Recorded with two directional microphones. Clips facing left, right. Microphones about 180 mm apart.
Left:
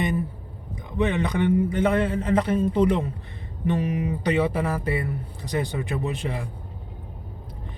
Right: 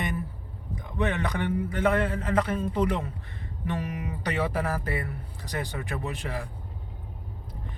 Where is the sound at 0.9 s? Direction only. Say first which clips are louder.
Left 5 dB; 20° left (ahead or behind).